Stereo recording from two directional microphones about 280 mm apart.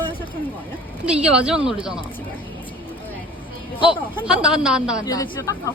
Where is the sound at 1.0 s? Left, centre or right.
Centre.